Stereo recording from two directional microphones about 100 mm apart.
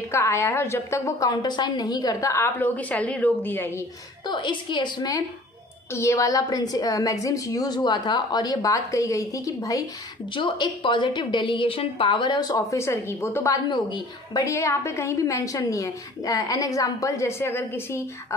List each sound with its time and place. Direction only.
0.1 s a woman's voice: 30° left (ahead or behind)
2.6 s a woman's voice: 15° left (ahead or behind)
4.3 s a woman's voice: 50° left (ahead or behind)
5.9 s a woman's voice: 30° left (ahead or behind)
10.3 s a woman's voice: 50° left (ahead or behind)
12.7 s a woman's voice: 25° left (ahead or behind)
13.7 s a woman's voice: 50° left (ahead or behind)
14.4 s a woman's voice: 30° left (ahead or behind)